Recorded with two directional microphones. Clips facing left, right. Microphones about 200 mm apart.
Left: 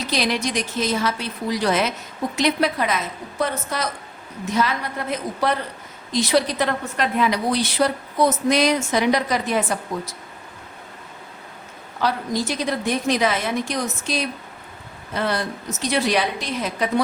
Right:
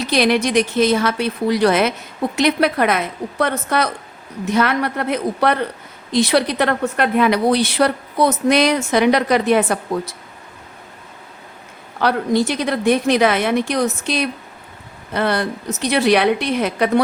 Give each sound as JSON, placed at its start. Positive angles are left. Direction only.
{"t": 0.1, "sound": "a woman's voice", "side_deg": -60}
{"t": 11.9, "sound": "a woman's voice", "side_deg": -65}